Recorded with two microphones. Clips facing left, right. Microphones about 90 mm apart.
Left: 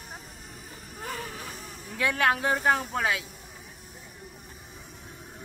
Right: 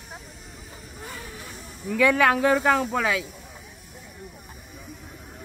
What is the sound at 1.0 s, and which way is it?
Vehicle, 65° left (ahead or behind).